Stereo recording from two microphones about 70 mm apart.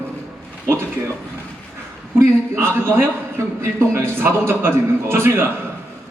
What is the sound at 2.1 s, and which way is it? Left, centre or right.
A man's voice, right.